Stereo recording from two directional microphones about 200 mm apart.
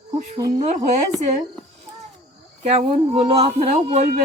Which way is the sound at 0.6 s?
35° right (ahead or behind).